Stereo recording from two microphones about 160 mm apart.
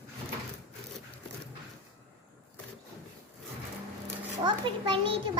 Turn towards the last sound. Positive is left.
turn(degrees=-30)  # may be behind; listen again after turning